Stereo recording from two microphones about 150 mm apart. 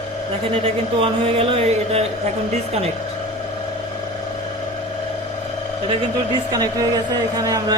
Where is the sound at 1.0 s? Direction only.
40° right (ahead or behind).